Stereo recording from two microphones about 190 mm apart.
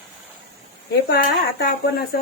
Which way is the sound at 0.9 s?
60° left (ahead or behind).